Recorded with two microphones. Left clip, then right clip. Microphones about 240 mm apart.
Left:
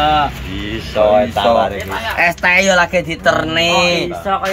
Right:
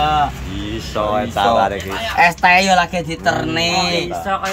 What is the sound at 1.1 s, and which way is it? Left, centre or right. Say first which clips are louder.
Speech: even; centre.